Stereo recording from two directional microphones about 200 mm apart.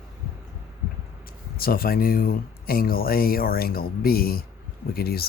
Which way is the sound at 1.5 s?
45° left (ahead or behind).